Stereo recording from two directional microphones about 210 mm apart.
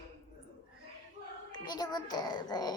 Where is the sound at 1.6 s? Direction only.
20° left (ahead or behind).